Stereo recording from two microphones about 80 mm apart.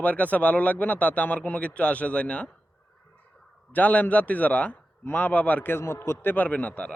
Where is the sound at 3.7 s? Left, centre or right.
Centre.